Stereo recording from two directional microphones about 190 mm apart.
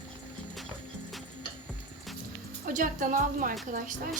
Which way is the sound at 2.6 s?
45° right (ahead or behind).